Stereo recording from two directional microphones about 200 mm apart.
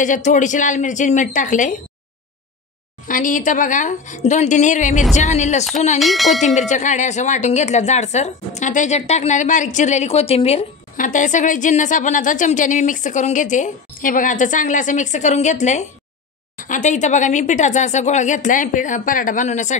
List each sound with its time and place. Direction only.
0.0 s speech: 40° left (ahead or behind)
3.1 s speech: 40° left (ahead or behind)
5.9 s speech: centre (ahead or behind)
6.4 s speech: 35° left (ahead or behind)